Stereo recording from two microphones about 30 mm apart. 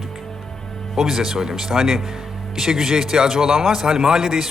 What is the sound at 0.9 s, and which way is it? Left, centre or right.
A man's voice, centre.